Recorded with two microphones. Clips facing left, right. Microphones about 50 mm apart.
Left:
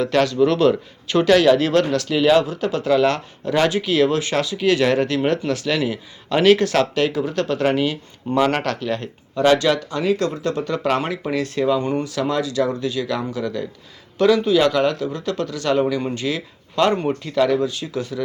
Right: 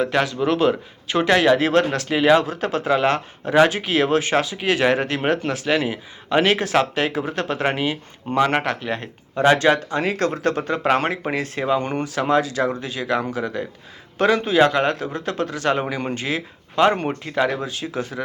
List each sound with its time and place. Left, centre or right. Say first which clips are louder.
0.0 s a man's voice: left 3 dB; centre; by 10.7 s right
10.7 s a man's voice: right 1 dB; right
11.8 s a man's voice: left 2 dB; right